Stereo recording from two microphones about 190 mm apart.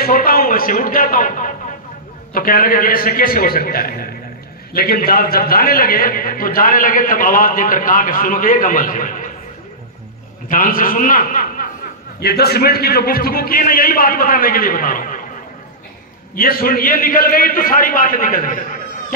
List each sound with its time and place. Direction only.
0.0 s a man's voice: 50° left (ahead or behind)
10.5 s a man's voice: 45° left (ahead or behind)
16.3 s a man's voice: 50° left (ahead or behind)